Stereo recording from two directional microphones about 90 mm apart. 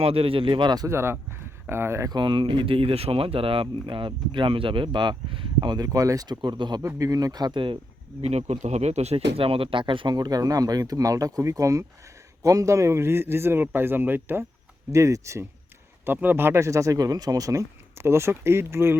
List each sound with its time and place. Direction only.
0.0 s speech: 90° right; by 0.9 s 55° right (ahead or behind)
0.9 s speech: 30° right (ahead or behind)
2.0 s speech: 60° right (ahead or behind)
6.8 s speech: 40° right (ahead or behind)
7.5 s speech: 75° right (ahead or behind)
9.1 s speech: 90° right; by 10.2 s 65° right (ahead or behind)
10.2 s speech: 45° right (ahead or behind); by 14.4 s 25° right (ahead or behind)
14.9 s speech: 35° right (ahead or behind)
16.0 s speech: 25° right (ahead or behind)